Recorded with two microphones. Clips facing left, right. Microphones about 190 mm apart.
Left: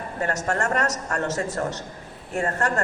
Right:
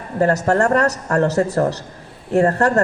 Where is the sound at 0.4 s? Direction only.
40° right (ahead or behind).